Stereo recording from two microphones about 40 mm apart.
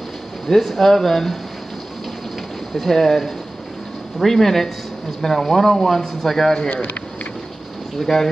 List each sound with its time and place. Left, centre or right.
0.5 s speech: centre
2.7 s a man's voice: centre
6.7 s speech: left
8.0 s a man's voice: centre